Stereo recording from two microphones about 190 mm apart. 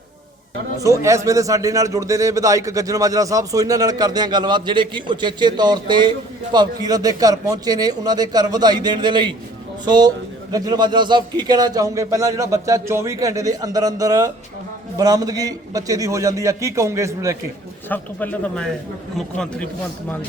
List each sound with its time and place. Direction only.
0.8 s a man's voice: 15° right (ahead or behind)
17.8 s speech: 10° left (ahead or behind)